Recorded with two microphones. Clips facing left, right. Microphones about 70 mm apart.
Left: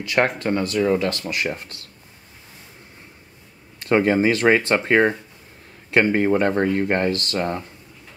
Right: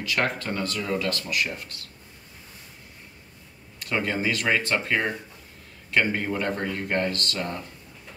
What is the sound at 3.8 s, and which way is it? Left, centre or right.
Speech, left.